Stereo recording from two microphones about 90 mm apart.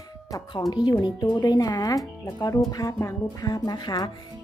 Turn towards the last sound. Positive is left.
turn(degrees=55)  # may be behind; listen again after turning